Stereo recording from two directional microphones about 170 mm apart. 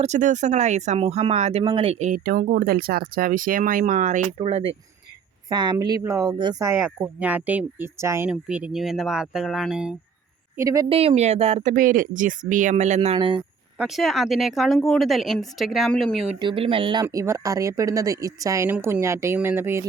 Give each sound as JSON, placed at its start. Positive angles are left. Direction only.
{"t": 0.0, "sound": "speech", "side_deg": -45}
{"t": 4.4, "sound": "speech", "side_deg": -35}
{"t": 5.5, "sound": "speech", "side_deg": -25}
{"t": 10.6, "sound": "speech", "side_deg": -20}
{"t": 10.8, "sound": "speech", "side_deg": -35}
{"t": 13.7, "sound": "speech", "side_deg": 0}
{"t": 16.4, "sound": "speech", "side_deg": -30}